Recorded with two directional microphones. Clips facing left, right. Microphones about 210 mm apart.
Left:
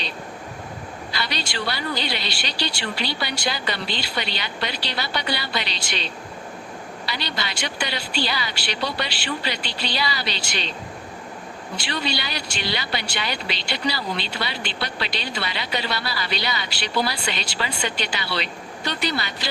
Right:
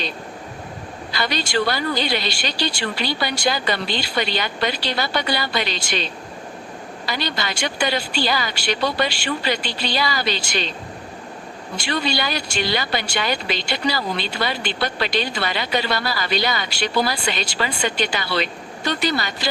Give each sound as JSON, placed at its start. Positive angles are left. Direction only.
{"t": 1.1, "sound": "speech", "side_deg": -45}
{"t": 11.8, "sound": "speech", "side_deg": -45}